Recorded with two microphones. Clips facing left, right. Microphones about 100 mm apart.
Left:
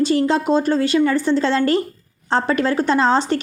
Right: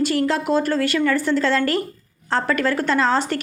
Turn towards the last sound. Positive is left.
turn(degrees=25)  # may be behind; listen again after turning